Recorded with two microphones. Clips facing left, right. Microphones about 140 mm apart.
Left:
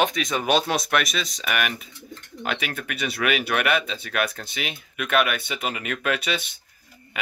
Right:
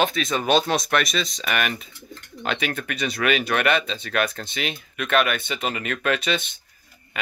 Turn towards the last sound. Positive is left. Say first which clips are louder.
# right 1 dB
turn(degrees=10)  # may be behind; listen again after turning